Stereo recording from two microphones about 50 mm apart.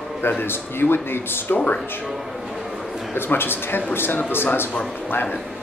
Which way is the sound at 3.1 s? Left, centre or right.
Left.